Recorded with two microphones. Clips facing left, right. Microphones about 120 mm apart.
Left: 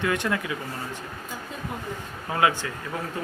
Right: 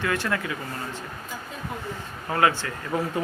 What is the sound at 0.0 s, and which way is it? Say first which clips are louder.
Speech: left 1 dB; 20° left (ahead or behind).